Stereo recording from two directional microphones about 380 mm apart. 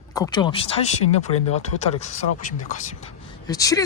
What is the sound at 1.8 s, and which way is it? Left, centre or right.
Speech, centre.